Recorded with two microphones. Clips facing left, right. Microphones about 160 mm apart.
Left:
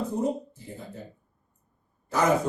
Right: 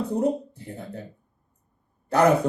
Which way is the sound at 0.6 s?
65° right (ahead or behind).